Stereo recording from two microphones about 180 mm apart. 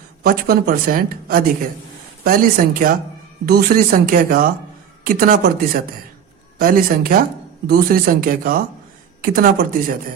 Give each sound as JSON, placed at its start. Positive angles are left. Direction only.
{"t": 0.2, "sound": "speech", "side_deg": -55}